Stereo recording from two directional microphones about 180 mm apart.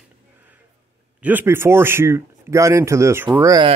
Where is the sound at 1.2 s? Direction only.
10° right (ahead or behind).